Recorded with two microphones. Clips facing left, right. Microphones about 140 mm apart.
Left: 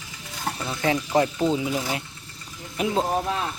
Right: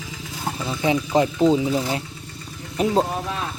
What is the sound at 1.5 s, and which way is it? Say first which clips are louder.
Speech: right 5 dB; 30° right (ahead or behind).